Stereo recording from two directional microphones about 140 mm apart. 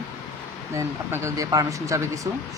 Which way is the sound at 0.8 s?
20° right (ahead or behind).